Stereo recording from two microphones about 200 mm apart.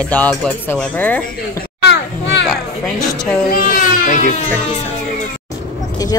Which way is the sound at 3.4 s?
45° left (ahead or behind).